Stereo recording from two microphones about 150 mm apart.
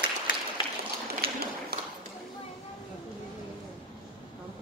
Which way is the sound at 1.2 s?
90° right.